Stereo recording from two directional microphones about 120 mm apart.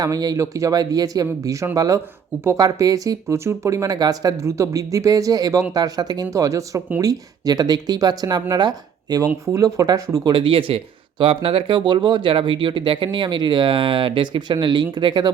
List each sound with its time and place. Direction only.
0.0 s speech: 35° right (ahead or behind)
10.2 s speech: 45° right (ahead or behind)